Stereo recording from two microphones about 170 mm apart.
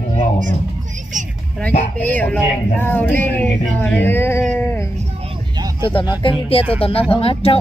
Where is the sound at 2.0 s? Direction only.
10° left (ahead or behind).